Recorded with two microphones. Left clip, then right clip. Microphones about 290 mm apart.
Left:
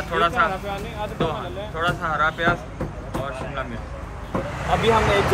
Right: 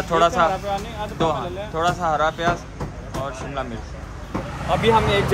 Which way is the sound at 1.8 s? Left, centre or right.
Centre.